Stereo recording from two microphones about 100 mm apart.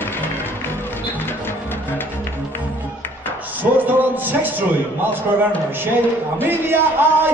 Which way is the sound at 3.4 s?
20° right (ahead or behind).